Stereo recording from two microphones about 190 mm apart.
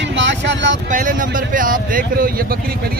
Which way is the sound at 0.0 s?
75° right (ahead or behind).